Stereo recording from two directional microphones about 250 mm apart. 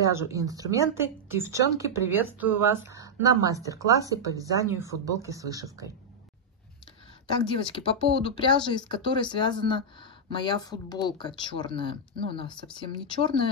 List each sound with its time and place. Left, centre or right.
0.0 s speech: centre
7.2 s speech: left